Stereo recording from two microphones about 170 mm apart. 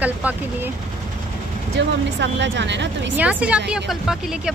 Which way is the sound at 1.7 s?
90° right.